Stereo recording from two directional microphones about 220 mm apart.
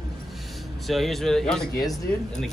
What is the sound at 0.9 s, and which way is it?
Speech, centre (ahead or behind).